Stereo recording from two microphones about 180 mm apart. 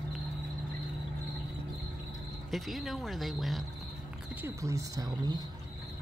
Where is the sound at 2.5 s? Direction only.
Centre (ahead or behind).